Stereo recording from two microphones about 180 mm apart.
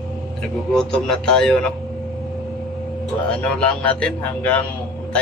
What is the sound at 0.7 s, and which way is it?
Speech, 5° left (ahead or behind).